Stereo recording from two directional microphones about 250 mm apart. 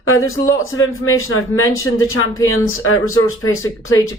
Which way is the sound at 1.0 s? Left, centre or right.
Left.